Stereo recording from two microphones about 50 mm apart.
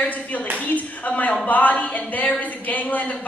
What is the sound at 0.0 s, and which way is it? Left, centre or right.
Clapping, left.